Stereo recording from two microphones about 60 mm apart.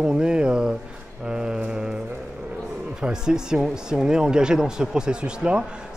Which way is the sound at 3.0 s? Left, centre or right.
Centre.